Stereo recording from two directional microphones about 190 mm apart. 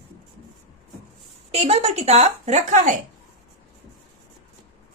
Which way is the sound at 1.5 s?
35° right (ahead or behind).